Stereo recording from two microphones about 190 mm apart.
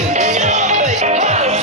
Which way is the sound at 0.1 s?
40° right (ahead or behind).